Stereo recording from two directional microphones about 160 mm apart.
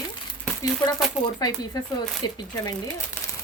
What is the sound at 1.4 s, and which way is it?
Speech, 25° left (ahead or behind).